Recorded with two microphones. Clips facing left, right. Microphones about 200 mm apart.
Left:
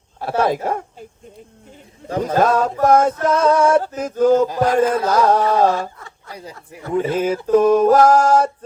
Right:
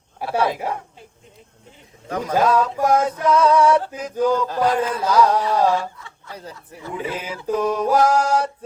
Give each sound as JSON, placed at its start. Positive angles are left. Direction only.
{"t": 0.3, "sound": "speech", "side_deg": 50}
{"t": 2.0, "sound": "a man's voice", "side_deg": 30}
{"t": 2.4, "sound": "music", "side_deg": 50}
{"t": 4.8, "sound": "speech", "side_deg": 50}
{"t": 6.8, "sound": "music", "side_deg": 45}